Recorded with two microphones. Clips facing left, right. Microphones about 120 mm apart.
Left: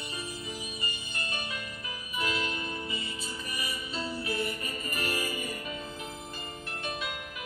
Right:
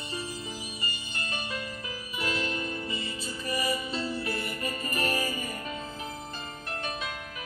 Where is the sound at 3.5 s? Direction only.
35° right (ahead or behind).